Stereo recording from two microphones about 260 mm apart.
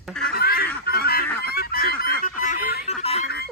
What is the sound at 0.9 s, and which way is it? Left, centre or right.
Fowl, left.